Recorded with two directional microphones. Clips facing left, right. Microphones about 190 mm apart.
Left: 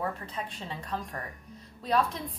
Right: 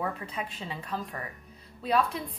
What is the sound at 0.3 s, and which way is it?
A woman's voice, 10° right (ahead or behind).